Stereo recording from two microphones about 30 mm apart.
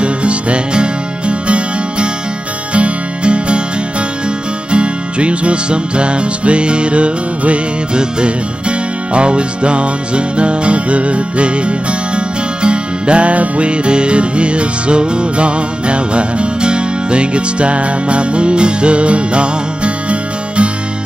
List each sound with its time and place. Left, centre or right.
0.0 s music: right
4.6 s music: right
7.9 s music: right